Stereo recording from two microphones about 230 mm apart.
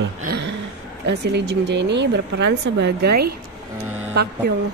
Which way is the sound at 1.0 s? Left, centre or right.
Right.